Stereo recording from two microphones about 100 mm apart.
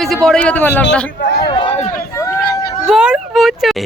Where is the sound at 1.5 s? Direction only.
55° left (ahead or behind).